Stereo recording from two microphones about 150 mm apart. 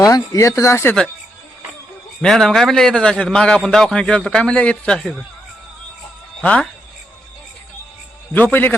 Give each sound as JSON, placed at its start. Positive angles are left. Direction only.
{"t": 0.0, "sound": "speech", "side_deg": 25}
{"t": 2.2, "sound": "a man's voice", "side_deg": 0}
{"t": 6.4, "sound": "speech", "side_deg": 10}
{"t": 8.3, "sound": "a man's voice", "side_deg": 10}